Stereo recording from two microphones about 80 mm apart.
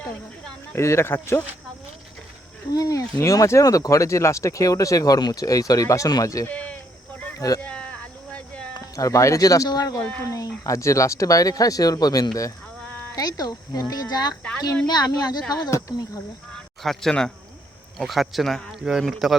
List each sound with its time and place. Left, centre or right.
0.8 s speech: left
2.7 s speech: left
6.5 s speech: centre
7.3 s speech: left
7.6 s a sound: centre
9.0 s speech: left
10.0 s speech: left
10.2 s speech: left
15.7 s speech: left
16.8 s speech: centre